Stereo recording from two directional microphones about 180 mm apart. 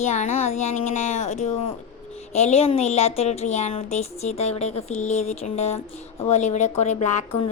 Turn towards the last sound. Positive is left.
turn(degrees=40)  # may be behind; listen again after turning